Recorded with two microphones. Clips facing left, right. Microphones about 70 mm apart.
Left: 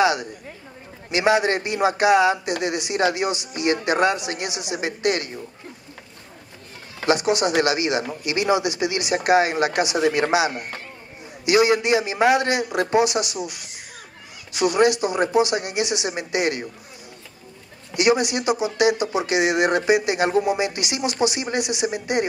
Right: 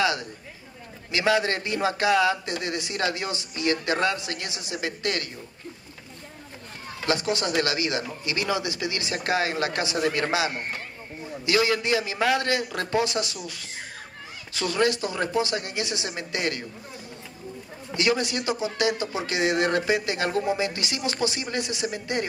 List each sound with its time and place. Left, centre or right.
0.0 s a sound: centre
1.1 s a man's voice: left
7.1 s a man's voice: left
17.9 s a man's voice: centre